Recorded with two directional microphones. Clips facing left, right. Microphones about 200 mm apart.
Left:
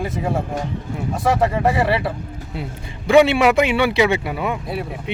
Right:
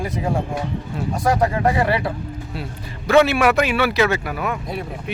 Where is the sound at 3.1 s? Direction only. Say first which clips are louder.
Left 2 dB; 20° left (ahead or behind).